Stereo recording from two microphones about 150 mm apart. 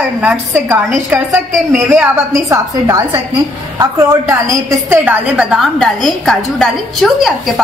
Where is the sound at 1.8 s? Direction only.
5° right (ahead or behind).